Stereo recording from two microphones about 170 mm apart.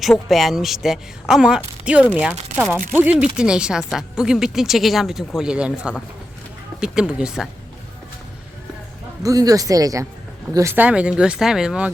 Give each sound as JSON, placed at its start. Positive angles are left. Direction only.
{"t": 0.0, "sound": "speech", "side_deg": 0}
{"t": 2.9, "sound": "speech", "side_deg": -10}
{"t": 9.2, "sound": "speech", "side_deg": -20}